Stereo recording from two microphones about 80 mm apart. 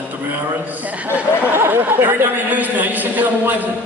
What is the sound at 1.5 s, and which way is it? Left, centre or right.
A man's voice, right.